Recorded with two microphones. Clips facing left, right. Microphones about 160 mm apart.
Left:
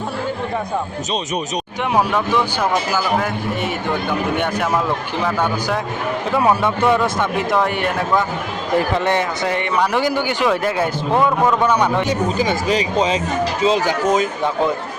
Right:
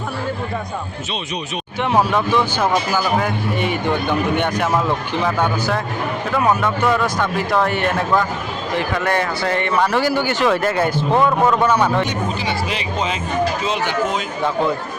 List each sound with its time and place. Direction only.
1.8 s a man's voice: 10° left (ahead or behind)
6.6 s speech: 25° left (ahead or behind)
9.0 s speech: 20° left (ahead or behind)
12.0 s speech: 40° left (ahead or behind)